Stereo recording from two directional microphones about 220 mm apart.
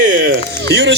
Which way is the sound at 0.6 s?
50° right (ahead or behind).